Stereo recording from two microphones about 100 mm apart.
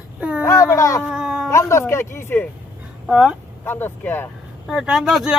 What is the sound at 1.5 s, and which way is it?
Speech, 30° left (ahead or behind).